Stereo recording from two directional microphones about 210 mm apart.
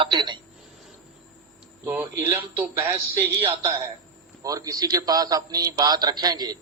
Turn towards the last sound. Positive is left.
turn(degrees=-20)  # may be behind; listen again after turning